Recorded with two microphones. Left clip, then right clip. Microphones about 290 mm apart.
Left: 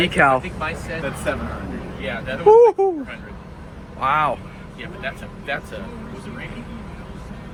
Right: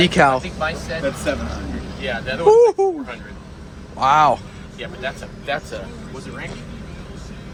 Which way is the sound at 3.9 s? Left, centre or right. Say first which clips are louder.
Right 5 dB; centre.